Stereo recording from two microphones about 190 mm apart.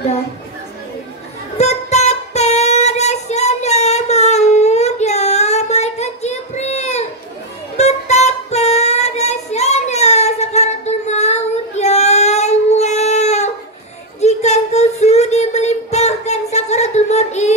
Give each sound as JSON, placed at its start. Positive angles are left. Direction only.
{"t": 1.6, "sound": "music", "side_deg": 35}
{"t": 14.2, "sound": "child singing", "side_deg": 35}